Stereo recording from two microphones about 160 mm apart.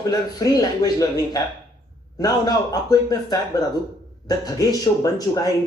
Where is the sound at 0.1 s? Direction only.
25° left (ahead or behind).